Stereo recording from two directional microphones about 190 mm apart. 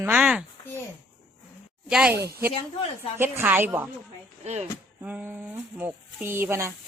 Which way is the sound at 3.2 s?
10° right (ahead or behind).